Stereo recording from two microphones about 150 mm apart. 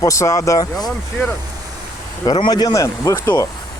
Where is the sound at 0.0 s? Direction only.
20° left (ahead or behind).